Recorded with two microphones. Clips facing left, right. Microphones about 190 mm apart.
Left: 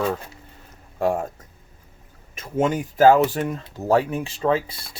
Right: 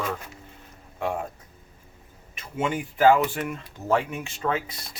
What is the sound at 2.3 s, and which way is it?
Speech, 40° left (ahead or behind).